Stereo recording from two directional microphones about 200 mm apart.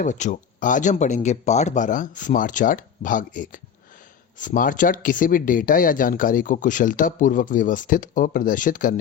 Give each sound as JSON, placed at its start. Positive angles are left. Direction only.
{"t": 0.0, "sound": "speech", "side_deg": 40}